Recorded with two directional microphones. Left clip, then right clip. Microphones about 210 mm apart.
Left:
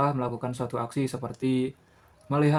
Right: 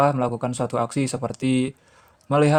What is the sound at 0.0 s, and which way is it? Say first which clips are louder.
Speech: right 7 dB; 40° right (ahead or behind).